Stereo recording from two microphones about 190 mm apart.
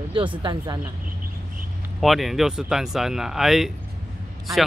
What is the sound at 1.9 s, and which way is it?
Speech, centre (ahead or behind).